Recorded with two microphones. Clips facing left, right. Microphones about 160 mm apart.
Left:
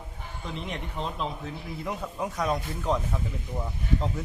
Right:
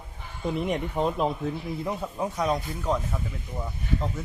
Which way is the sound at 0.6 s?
50° right (ahead or behind).